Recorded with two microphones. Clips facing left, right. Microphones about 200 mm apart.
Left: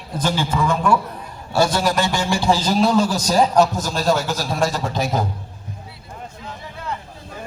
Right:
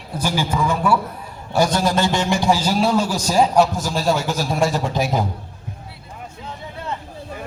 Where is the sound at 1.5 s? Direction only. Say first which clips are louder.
Even; 20° right (ahead or behind).